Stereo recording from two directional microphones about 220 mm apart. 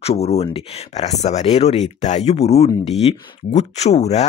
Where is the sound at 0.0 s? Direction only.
30° left (ahead or behind).